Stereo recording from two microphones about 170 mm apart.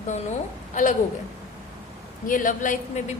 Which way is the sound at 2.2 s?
50° left (ahead or behind).